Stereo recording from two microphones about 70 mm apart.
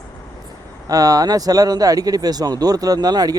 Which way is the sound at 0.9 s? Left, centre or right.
Right.